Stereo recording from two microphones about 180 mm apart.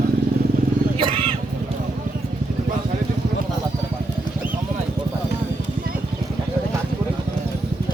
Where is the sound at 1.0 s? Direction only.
30° right (ahead or behind).